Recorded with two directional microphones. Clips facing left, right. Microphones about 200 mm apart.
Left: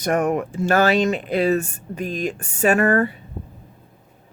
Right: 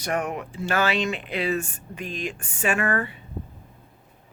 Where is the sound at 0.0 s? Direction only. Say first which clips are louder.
Left 7 dB; 50° left (ahead or behind).